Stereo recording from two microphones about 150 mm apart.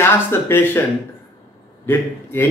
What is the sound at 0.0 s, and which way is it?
Speech, 15° left (ahead or behind).